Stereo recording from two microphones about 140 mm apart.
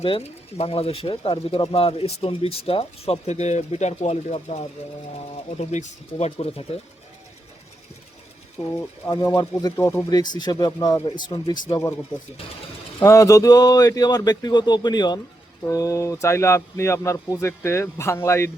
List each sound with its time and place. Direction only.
0.0 s speech: 45° left (ahead or behind)
6.3 s speech: 40° left (ahead or behind)
8.7 s speech: 25° left (ahead or behind)
10.1 s speech: 30° left (ahead or behind)
13.0 s speech: 20° left (ahead or behind)